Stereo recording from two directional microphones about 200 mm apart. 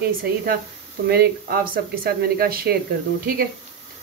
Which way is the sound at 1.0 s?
50° right (ahead or behind).